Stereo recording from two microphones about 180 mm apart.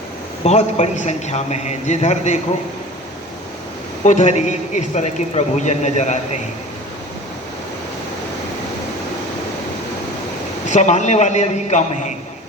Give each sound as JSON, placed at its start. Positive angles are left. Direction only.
{"t": 0.4, "sound": "a man's voice", "side_deg": 40}
{"t": 4.0, "sound": "a man's voice", "side_deg": 40}
{"t": 10.7, "sound": "a man's voice", "side_deg": 40}